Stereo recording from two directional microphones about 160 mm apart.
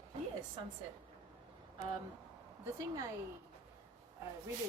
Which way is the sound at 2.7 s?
20° right (ahead or behind).